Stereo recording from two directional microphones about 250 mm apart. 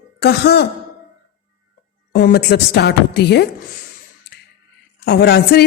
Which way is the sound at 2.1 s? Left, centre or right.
Left.